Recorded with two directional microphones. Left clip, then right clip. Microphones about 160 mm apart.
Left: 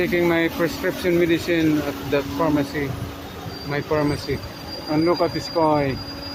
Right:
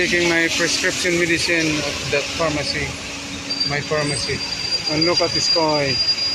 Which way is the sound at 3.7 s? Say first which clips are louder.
Left 4 dB; 15° left (ahead or behind).